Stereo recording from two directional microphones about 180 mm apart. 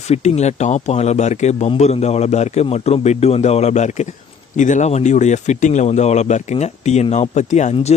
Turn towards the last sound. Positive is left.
turn(degrees=40)  # may be behind; listen again after turning